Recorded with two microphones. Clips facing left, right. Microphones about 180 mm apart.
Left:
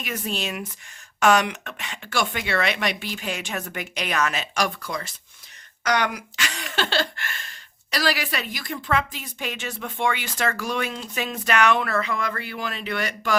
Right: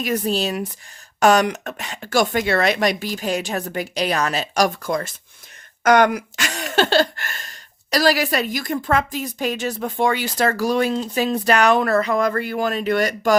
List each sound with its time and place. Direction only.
0.0 s speech: 35° right (ahead or behind)